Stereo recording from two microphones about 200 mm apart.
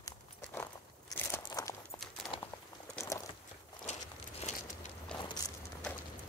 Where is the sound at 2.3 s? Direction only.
25° left (ahead or behind).